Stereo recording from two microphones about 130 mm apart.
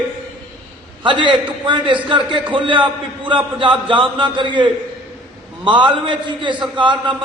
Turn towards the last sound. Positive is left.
turn(degrees=-40)  # may be behind; listen again after turning